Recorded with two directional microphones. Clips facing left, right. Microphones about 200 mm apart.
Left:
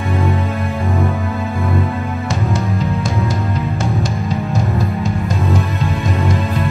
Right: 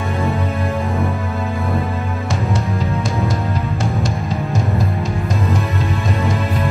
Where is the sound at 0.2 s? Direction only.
Centre (ahead or behind).